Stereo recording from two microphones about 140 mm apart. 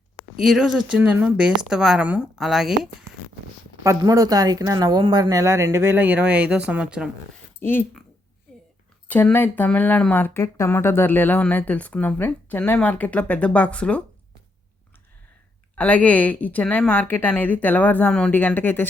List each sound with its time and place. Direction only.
0.4 s a woman's voice: centre (ahead or behind)
3.8 s a woman's voice: 25° right (ahead or behind); by 7.1 s 5° right (ahead or behind)
7.6 s speech: 15° left (ahead or behind)
8.5 s whispering: 5° left (ahead or behind)
9.0 s speech: 10° left (ahead or behind)
15.7 s speech: 10° left (ahead or behind)